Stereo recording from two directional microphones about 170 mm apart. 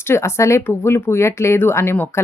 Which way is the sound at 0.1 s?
15° left (ahead or behind).